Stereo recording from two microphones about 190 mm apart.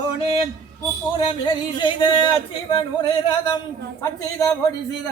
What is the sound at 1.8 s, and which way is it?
A man's voice, 25° left (ahead or behind).